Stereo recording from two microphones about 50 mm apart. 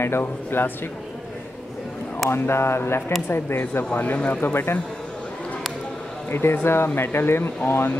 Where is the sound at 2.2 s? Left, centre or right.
Left.